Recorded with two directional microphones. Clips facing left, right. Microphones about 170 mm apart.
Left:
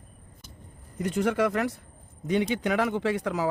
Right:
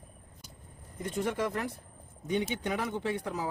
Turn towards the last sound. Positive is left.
turn(degrees=90)